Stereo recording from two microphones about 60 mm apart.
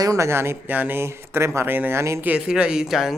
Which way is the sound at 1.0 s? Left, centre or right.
Right.